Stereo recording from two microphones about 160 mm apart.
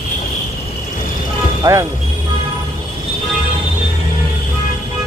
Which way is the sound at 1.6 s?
20° right (ahead or behind).